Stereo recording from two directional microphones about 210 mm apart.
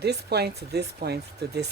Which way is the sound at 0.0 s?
50° right (ahead or behind).